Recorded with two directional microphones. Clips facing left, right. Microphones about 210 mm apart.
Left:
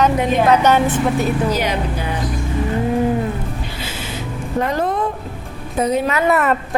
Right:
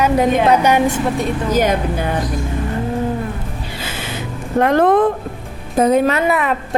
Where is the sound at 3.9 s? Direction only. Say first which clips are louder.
Right 1 dB; 60° right (ahead or behind).